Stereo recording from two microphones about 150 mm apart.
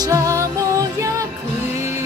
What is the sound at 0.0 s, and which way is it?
Music, 20° right (ahead or behind).